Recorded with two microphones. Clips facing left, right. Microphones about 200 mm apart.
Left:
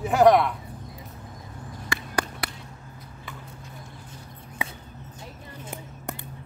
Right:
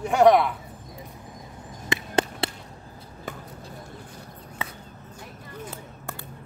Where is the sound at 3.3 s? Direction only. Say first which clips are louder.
Right 7 dB; 45° right (ahead or behind).